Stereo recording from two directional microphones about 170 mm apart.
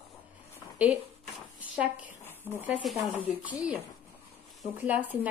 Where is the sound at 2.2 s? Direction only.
15° left (ahead or behind).